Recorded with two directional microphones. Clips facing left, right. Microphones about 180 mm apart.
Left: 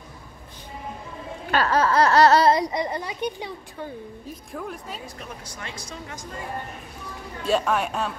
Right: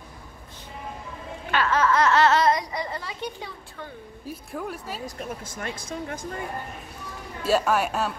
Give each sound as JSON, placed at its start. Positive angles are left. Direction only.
{"t": 1.5, "sound": "laughter", "side_deg": 35}
{"t": 4.3, "sound": "a woman's voice", "side_deg": -5}
{"t": 5.0, "sound": "speech", "side_deg": -45}
{"t": 7.4, "sound": "a woman's voice", "side_deg": -5}